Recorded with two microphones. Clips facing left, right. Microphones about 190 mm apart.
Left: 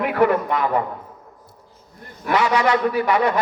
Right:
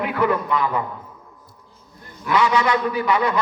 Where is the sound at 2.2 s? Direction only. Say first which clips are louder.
Even; 60° left (ahead or behind).